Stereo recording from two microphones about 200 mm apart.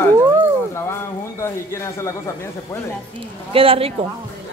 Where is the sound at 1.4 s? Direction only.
15° left (ahead or behind).